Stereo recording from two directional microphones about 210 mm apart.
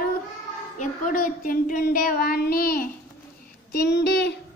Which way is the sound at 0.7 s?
40° left (ahead or behind).